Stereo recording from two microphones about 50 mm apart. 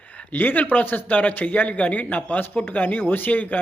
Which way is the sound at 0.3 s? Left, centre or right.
Left.